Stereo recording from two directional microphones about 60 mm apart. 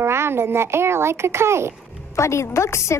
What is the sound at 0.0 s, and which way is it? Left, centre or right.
A child's voice, right.